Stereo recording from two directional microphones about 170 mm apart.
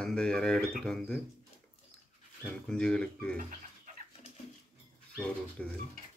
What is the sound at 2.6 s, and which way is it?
Speech, 5° left (ahead or behind).